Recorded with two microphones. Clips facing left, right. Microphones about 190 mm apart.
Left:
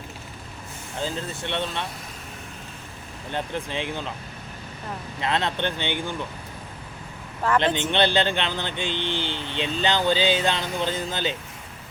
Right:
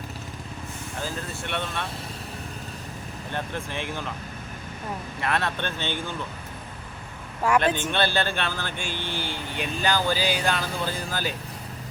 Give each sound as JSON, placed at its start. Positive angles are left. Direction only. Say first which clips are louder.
{"t": 0.9, "sound": "speech", "louder": "left 4 dB", "side_deg": 20}
{"t": 3.3, "sound": "speech", "louder": "left 3 dB", "side_deg": 20}
{"t": 5.2, "sound": "speech", "louder": "left 2 dB", "side_deg": 20}
{"t": 7.4, "sound": "speech", "louder": "right 1 dB", "side_deg": -10}
{"t": 7.8, "sound": "speech", "louder": "left 3 dB", "side_deg": 20}